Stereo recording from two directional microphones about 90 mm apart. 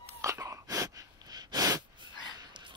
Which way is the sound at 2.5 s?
60° right (ahead or behind).